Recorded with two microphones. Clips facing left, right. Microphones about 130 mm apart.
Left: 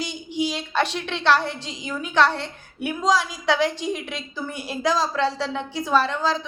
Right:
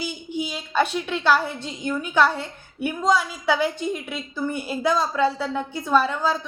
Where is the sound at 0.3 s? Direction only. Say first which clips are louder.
Left 5 dB; 85° left.